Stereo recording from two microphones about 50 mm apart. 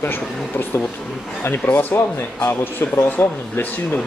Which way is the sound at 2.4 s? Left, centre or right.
Left.